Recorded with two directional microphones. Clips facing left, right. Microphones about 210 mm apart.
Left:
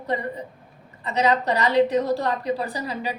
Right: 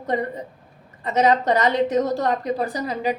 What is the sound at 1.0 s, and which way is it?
A woman's voice, 50° right (ahead or behind).